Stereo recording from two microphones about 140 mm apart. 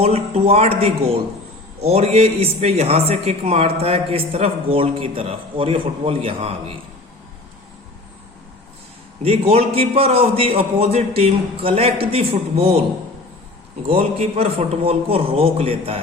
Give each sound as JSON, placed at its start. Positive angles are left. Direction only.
{"t": 0.0, "sound": "speech", "side_deg": -45}
{"t": 9.2, "sound": "speech", "side_deg": -45}
{"t": 13.8, "sound": "speech", "side_deg": -45}